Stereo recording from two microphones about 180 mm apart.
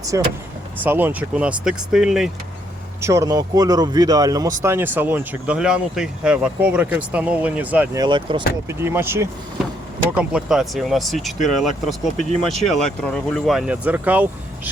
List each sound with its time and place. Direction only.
0.1 s speech: 20° right (ahead or behind); by 2.3 s 5° right (ahead or behind)
3.0 s speech: 15° right (ahead or behind)
7.9 s speech: 25° right (ahead or behind)
8.6 s speech: 15° right (ahead or behind)